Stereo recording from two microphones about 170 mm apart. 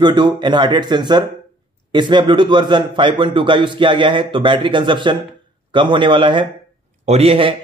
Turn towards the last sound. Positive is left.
turn(degrees=-35)  # may be behind; listen again after turning